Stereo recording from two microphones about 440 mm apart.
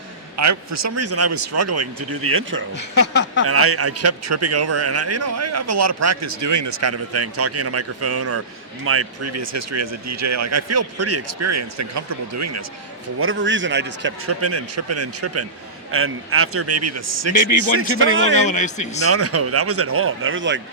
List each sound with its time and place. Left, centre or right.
0.3 s a man's voice: right
2.7 s speech: left
3.4 s a man's voice: right
13.1 s a man's voice: right
18.4 s a man's voice: centre
19.0 s a man's voice: right